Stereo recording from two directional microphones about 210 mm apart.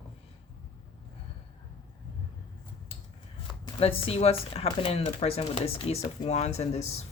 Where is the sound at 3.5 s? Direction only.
25° left (ahead or behind).